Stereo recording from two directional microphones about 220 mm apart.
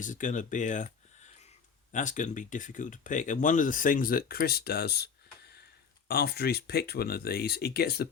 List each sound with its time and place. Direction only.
0.0 s speech: 35° left (ahead or behind)
6.1 s speech: 45° left (ahead or behind)